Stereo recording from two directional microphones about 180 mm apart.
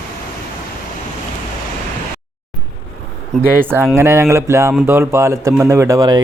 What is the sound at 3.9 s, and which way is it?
Speech, 15° right (ahead or behind).